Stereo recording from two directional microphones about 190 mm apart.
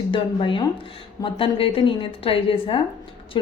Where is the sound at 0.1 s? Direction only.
25° left (ahead or behind).